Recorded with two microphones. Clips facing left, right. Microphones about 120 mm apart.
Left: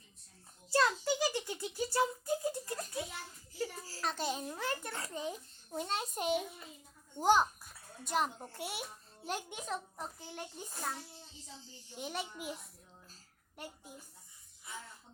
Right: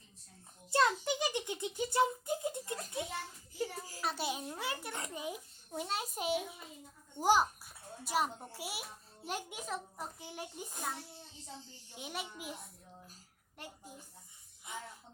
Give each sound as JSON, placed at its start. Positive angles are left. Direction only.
{"t": 0.7, "sound": "a sound", "side_deg": -20}
{"t": 3.6, "sound": "a child's voice", "side_deg": -20}
{"t": 11.9, "sound": "a child's voice", "side_deg": 0}